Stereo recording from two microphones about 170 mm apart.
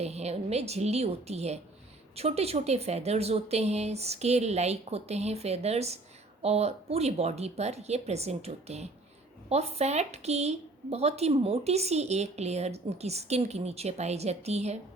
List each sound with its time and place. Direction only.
0.0 s a woman's voice: 40° right (ahead or behind)